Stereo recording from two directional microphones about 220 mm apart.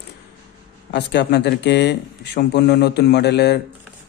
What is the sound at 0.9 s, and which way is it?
A man's voice, 50° left (ahead or behind).